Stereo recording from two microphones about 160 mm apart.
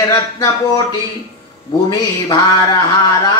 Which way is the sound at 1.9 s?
25° left (ahead or behind).